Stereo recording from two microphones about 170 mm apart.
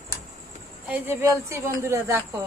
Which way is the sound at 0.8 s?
10° right (ahead or behind).